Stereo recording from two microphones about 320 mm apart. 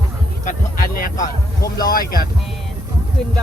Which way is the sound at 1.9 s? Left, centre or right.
Left.